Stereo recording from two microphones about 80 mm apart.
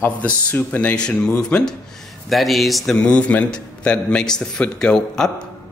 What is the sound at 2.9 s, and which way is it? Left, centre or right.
A man's voice, centre.